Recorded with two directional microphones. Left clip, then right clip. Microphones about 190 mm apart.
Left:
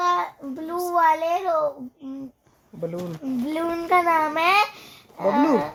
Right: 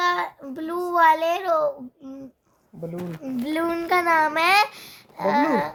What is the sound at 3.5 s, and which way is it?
A child's voice, 10° right (ahead or behind).